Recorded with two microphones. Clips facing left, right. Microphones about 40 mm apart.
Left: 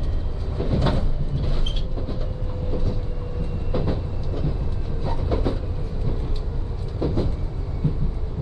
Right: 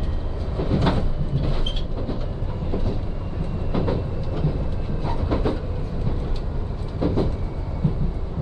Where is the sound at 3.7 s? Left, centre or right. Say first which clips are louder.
Right 2 dB; centre.